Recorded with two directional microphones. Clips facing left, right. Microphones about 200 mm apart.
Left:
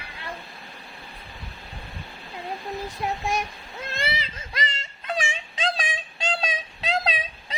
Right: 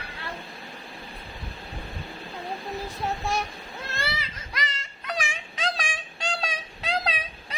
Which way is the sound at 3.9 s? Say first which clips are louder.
Left 3 dB; 25° left (ahead or behind).